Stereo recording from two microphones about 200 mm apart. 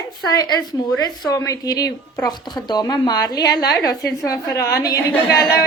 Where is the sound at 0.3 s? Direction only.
20° left (ahead or behind).